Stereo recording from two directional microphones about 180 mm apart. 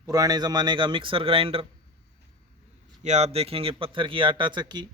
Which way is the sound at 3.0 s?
40° right (ahead or behind).